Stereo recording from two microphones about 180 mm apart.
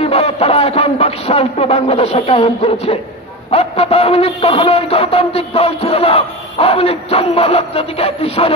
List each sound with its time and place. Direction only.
0.0 s speech: 35° left (ahead or behind)